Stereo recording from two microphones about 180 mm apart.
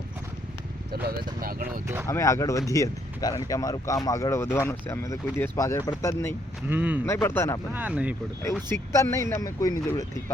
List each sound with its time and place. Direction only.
1.0 s speech: 55° right (ahead or behind)
2.0 s speech: 15° left (ahead or behind)
6.7 s speech: 10° right (ahead or behind)
7.0 s speech: 15° left (ahead or behind)
7.7 s speech: 10° right (ahead or behind)
8.7 s speech: 15° left (ahead or behind)